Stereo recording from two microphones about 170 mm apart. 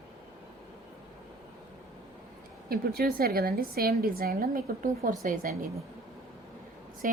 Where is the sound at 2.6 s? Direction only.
60° right (ahead or behind).